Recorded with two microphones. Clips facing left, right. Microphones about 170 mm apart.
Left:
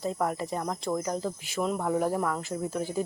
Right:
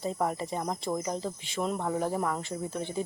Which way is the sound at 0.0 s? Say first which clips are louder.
Left 1 dB; centre (ahead or behind).